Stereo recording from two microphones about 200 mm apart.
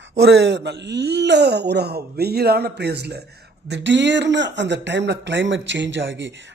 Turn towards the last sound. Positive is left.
turn(degrees=-60)  # may be behind; listen again after turning